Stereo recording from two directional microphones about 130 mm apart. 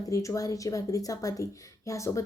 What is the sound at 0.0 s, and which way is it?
A woman's voice, 25° left (ahead or behind).